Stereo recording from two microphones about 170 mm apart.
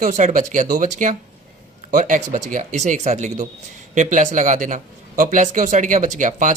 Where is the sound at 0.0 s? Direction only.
45° right (ahead or behind).